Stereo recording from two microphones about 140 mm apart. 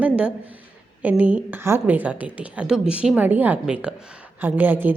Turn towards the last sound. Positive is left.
turn(degrees=-15)  # may be behind; listen again after turning